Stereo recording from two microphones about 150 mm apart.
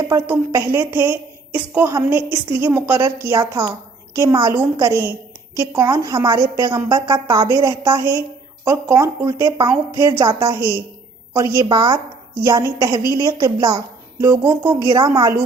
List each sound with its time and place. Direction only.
0.0 s a woman's voice: 20° right (ahead or behind)
13.6 s a sound: 30° right (ahead or behind)
14.3 s a woman's voice: 15° right (ahead or behind)
14.8 s a woman's voice: 25° right (ahead or behind)